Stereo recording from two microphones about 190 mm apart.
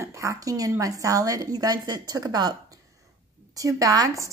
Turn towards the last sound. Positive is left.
turn(degrees=-15)  # may be behind; listen again after turning